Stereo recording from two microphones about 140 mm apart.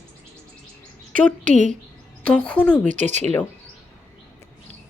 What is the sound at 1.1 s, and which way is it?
Speech, 65° right (ahead or behind).